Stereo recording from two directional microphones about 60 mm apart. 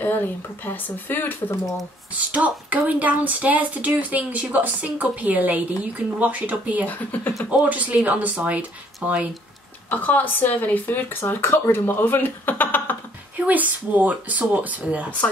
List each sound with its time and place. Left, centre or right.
0.0 s speech: left
2.1 s speech: right
6.9 s speech: left
7.4 s speech: right
9.8 s speech: left
13.5 s speech: right